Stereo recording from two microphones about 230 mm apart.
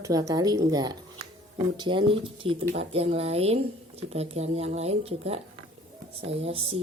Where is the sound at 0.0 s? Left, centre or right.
Centre.